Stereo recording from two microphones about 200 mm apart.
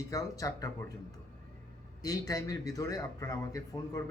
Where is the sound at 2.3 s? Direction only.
20° left (ahead or behind).